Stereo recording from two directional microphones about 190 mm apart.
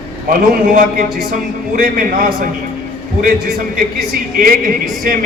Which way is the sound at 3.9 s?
50° right (ahead or behind).